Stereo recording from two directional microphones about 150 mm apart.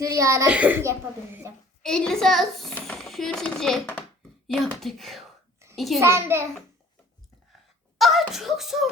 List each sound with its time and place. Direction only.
0.0 s a child's voice: 20° right (ahead or behind)
0.4 s speech: 10° right (ahead or behind)
1.8 s a child's voice: 5° left (ahead or behind)
6.0 s speech: 15° right (ahead or behind)
7.9 s speech: centre (ahead or behind)